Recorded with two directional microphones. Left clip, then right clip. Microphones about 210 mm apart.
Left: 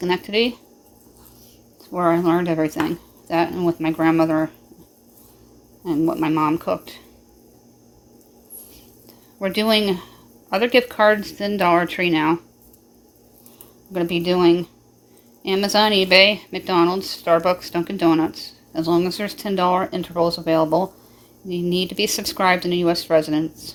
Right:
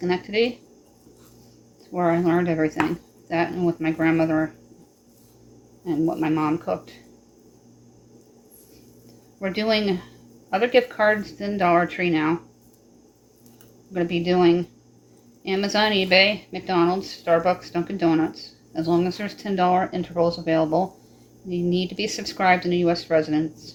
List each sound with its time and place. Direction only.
0.0 s speech: 45° left (ahead or behind)
1.9 s speech: 45° left (ahead or behind)
5.8 s speech: 45° left (ahead or behind)
9.4 s speech: 45° left (ahead or behind)
13.9 s speech: 45° left (ahead or behind)